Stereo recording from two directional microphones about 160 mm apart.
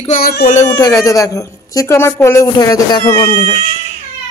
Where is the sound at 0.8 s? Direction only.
20° left (ahead or behind).